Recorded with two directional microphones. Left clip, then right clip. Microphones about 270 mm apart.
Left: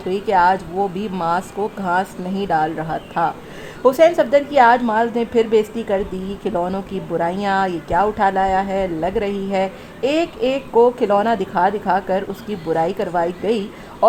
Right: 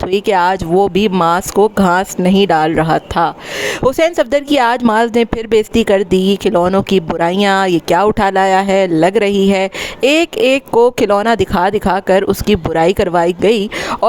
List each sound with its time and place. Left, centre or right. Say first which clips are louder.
0.1 s a woman's voice: right 2 dB; right